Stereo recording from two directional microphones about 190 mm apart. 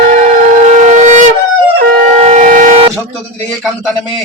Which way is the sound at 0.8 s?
40° right (ahead or behind).